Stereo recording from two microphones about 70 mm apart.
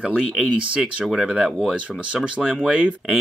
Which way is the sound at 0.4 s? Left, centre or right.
Centre.